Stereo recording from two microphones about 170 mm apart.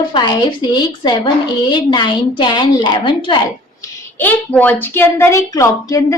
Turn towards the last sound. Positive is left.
turn(degrees=20)  # may be behind; listen again after turning